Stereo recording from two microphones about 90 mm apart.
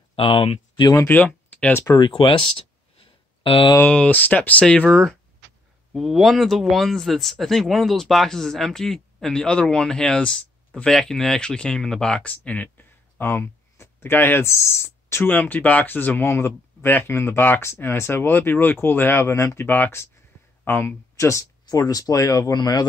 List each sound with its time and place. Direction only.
0.1 s speech: 90° left
1.0 s speech: 20° left (ahead or behind)
2.0 s a sound: 70° left (ahead or behind)
3.9 s speech: 15° left (ahead or behind)
4.8 s speech: centre (ahead or behind); by 22.6 s 40° left (ahead or behind)
22.6 s speech: 50° left (ahead or behind)